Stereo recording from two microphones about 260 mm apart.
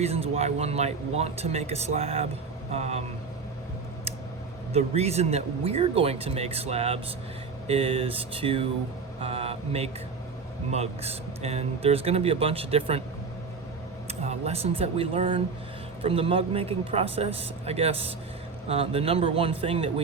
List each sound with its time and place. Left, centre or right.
0.0 s speech: right
4.7 s speech: right
14.1 s speech: right